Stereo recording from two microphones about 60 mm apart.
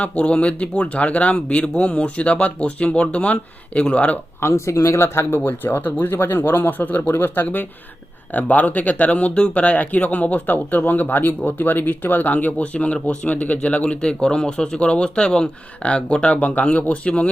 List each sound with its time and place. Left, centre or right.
0.0 s speech: left
4.4 s speech: left
5.5 s speech: left